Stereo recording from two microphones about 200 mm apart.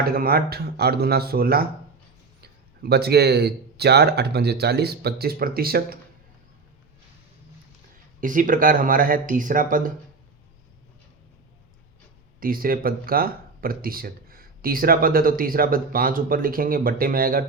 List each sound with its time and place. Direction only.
0.0 s speech: 50° right (ahead or behind)
8.2 s speech: 40° right (ahead or behind)
12.4 s speech: 45° right (ahead or behind)